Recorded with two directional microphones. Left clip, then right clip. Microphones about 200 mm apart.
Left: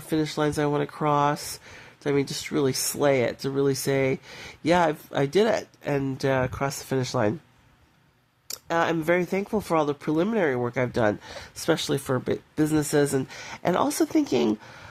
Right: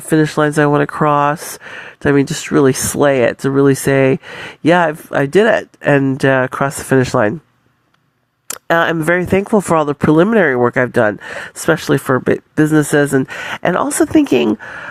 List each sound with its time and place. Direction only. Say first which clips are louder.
0.1 s speech: right 12 dB; 30° right (ahead or behind)
8.4 s speech: right 11 dB; 40° right (ahead or behind)